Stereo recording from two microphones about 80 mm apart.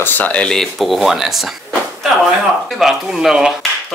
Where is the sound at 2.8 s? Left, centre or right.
Centre.